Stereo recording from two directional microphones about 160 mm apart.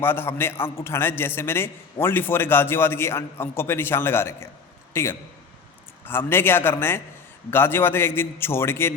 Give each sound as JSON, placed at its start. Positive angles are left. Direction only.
{"t": 0.0, "sound": "a man's voice", "side_deg": 15}